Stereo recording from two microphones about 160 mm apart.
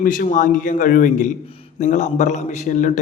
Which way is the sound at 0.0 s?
60° left (ahead or behind).